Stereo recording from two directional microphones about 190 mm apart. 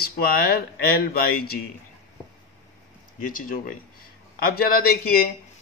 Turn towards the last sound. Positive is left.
turn(degrees=55)  # may be behind; listen again after turning